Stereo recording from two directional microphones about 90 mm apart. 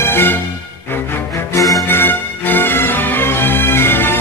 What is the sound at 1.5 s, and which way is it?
Music, 40° left (ahead or behind).